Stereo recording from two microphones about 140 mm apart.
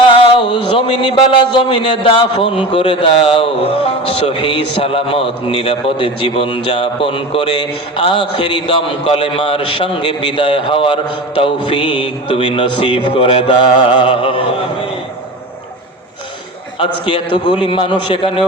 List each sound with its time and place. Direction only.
0.1 s a man's voice: 35° left (ahead or behind)
16.8 s a man's voice: 35° left (ahead or behind)